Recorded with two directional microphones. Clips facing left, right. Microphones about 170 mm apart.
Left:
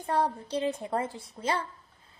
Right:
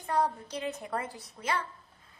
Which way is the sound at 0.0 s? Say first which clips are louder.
Left 1 dB; 30° left (ahead or behind).